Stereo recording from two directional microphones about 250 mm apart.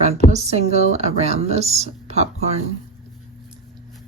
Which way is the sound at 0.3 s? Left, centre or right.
Right.